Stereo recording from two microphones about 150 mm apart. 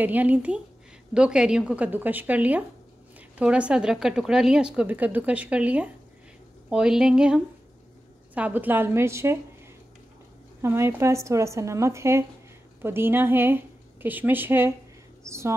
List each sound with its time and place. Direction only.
0.0 s speech: 10° right (ahead or behind)
10.6 s a woman's voice: 15° right (ahead or behind)